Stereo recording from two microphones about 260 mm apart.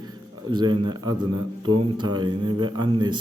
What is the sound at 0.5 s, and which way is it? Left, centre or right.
A man's voice, centre.